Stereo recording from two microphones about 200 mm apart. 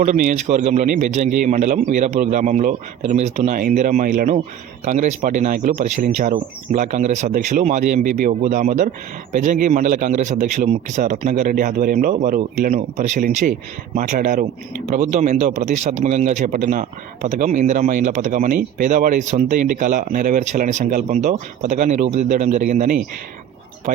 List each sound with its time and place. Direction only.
0.0 s speech: 40° right (ahead or behind)